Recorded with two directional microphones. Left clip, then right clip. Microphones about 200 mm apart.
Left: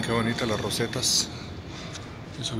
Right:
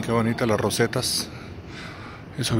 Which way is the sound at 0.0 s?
25° right (ahead or behind).